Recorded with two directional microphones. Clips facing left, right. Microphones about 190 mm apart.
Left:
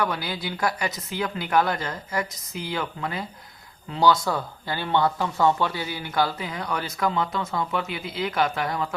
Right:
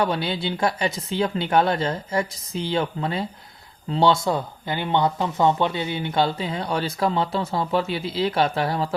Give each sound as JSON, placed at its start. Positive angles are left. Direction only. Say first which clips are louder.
{"t": 0.0, "sound": "speech", "louder": "right 4 dB", "side_deg": -30}